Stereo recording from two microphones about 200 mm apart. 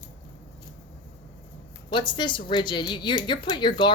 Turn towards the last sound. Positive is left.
turn(degrees=25)  # may be behind; listen again after turning